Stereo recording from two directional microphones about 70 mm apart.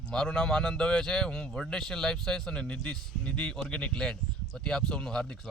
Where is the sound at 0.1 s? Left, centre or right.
Centre.